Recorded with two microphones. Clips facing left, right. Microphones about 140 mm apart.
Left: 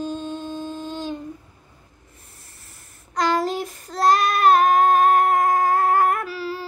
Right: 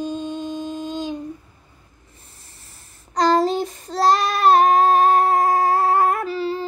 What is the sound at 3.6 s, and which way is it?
Child singing, 30° right (ahead or behind).